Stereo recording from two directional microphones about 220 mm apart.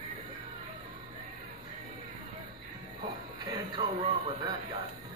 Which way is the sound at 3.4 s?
20° right (ahead or behind).